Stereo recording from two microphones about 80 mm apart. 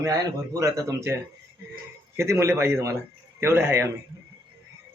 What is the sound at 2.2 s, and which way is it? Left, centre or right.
Speech, right.